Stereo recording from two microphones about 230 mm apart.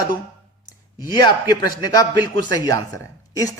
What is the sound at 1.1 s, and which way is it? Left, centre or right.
A woman's voice, centre.